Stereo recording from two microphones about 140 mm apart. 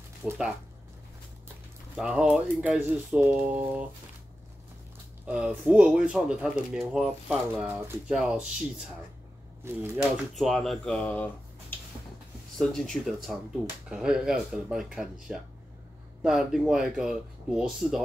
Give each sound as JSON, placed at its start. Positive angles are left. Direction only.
{"t": 0.2, "sound": "speech", "side_deg": -5}
{"t": 2.0, "sound": "speech", "side_deg": -5}
{"t": 5.2, "sound": "speech", "side_deg": -10}
{"t": 7.6, "sound": "speech", "side_deg": -20}
{"t": 8.1, "sound": "speech", "side_deg": -5}
{"t": 9.6, "sound": "speech", "side_deg": -20}
{"t": 10.3, "sound": "speech", "side_deg": 0}
{"t": 12.5, "sound": "speech", "side_deg": 5}